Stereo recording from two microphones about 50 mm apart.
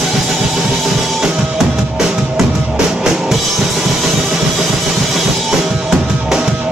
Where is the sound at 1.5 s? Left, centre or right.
Right.